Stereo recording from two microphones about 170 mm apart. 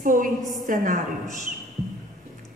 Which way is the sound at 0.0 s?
50° right (ahead or behind).